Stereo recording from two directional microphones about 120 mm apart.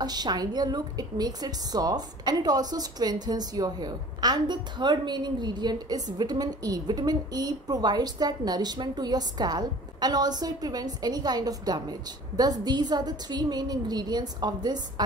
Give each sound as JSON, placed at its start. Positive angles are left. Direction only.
{"t": 0.0, "sound": "a woman's voice", "side_deg": -35}